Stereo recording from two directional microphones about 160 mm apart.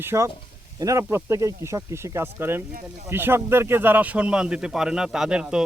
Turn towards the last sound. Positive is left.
turn(degrees=-5)  # may be behind; listen again after turning